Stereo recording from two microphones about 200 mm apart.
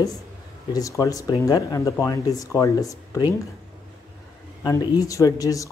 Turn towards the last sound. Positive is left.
turn(degrees=15)  # may be behind; listen again after turning